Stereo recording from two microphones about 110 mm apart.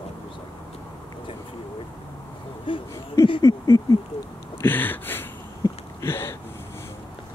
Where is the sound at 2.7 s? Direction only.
50° left (ahead or behind).